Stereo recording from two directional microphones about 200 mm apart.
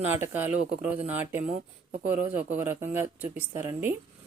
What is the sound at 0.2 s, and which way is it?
A woman's voice, 10° right (ahead or behind).